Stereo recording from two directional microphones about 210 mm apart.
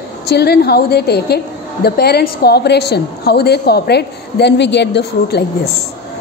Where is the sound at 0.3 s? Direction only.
50° left (ahead or behind).